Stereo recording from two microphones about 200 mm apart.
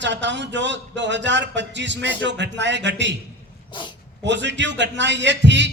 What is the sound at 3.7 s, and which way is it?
Speech, 25° left (ahead or behind).